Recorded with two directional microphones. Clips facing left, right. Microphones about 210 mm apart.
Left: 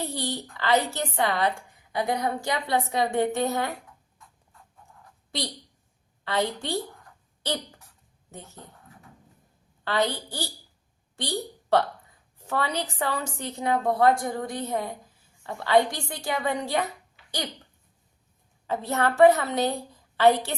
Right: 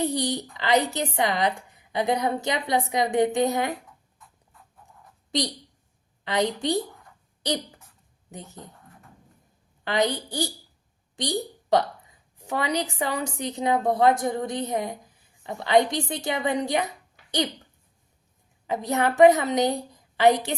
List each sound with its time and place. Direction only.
0.0 s a woman's voice: 15° right (ahead or behind)
6.2 s a woman's voice: 15° right (ahead or behind)
6.8 s a sound: centre (ahead or behind)
8.3 s a woman's voice: 15° right (ahead or behind)
8.7 s a sound: centre (ahead or behind)
9.8 s a woman's voice: 15° right (ahead or behind)
18.7 s a woman's voice: 15° right (ahead or behind)